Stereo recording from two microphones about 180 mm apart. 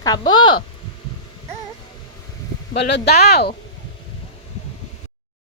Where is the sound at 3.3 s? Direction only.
65° left (ahead or behind).